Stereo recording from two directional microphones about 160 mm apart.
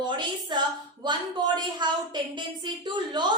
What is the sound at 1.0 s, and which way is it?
A woman's voice, 30° right (ahead or behind).